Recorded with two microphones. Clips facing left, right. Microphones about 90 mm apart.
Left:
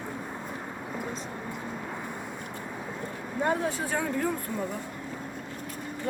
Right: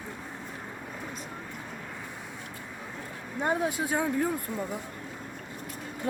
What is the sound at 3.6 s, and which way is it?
Speech, 15° right (ahead or behind).